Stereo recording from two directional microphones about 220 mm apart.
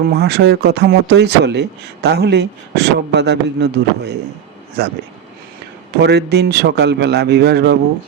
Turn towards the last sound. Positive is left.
turn(degrees=-50)  # may be behind; listen again after turning